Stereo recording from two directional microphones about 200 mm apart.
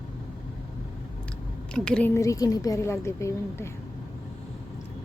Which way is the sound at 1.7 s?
5° left (ahead or behind).